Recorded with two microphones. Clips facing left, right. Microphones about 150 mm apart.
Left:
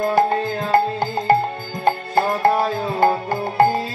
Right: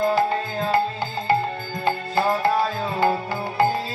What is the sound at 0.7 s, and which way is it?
Music, 50° left (ahead or behind).